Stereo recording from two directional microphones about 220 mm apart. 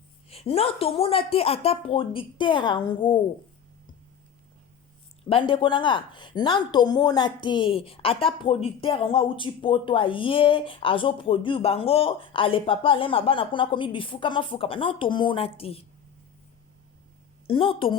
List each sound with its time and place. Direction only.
0.3 s speech: 25° left (ahead or behind)
5.3 s speech: 25° left (ahead or behind)
17.4 s a woman's voice: 25° left (ahead or behind)